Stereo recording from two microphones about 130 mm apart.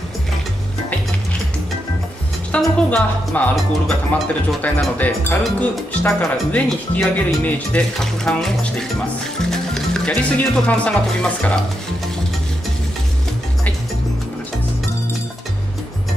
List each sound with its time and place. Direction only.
2.5 s speech: 10° left (ahead or behind)